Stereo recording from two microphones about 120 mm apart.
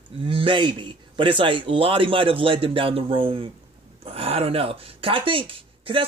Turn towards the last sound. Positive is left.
turn(degrees=-45)  # may be behind; listen again after turning